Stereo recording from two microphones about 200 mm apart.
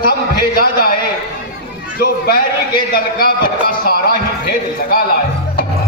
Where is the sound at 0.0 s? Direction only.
45° left (ahead or behind).